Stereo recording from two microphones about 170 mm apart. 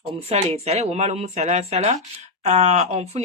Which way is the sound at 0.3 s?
35° right (ahead or behind).